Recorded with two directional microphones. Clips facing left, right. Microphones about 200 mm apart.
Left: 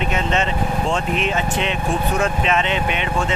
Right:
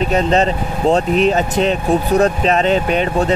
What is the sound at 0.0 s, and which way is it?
Speech, 35° right (ahead or behind).